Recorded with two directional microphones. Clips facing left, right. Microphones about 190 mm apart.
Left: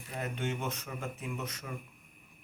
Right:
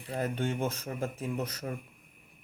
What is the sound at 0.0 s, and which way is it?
Speech, 35° right (ahead or behind).